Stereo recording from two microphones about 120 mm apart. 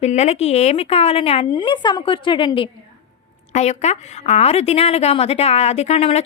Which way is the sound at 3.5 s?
70° left (ahead or behind).